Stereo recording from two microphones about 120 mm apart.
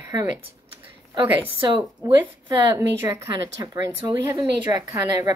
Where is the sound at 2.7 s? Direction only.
20° right (ahead or behind).